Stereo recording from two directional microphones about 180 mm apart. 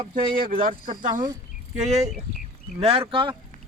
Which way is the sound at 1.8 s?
40° right (ahead or behind).